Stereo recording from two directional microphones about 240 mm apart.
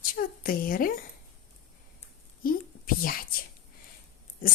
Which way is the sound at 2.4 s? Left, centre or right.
Left.